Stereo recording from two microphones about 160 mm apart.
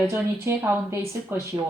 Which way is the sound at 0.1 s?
15° right (ahead or behind).